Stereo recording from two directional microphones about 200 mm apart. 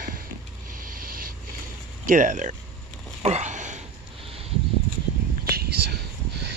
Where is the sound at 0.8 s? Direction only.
45° right (ahead or behind).